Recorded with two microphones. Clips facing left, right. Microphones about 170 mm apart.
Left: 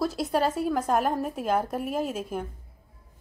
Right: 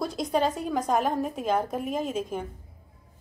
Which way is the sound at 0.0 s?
5° left (ahead or behind).